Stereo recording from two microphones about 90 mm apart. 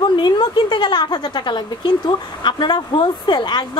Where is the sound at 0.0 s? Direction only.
60° left (ahead or behind).